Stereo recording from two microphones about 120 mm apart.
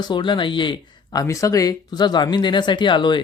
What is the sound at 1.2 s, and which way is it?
Speech, 25° left (ahead or behind).